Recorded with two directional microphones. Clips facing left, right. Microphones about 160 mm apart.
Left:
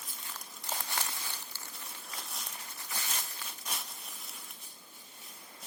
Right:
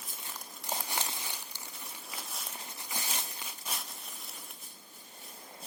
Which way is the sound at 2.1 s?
5° right (ahead or behind).